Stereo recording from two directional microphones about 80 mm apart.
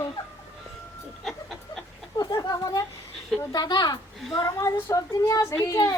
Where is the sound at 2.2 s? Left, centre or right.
Left.